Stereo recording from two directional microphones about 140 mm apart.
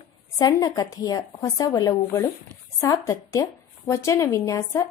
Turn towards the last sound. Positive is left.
turn(degrees=20)  # may be behind; listen again after turning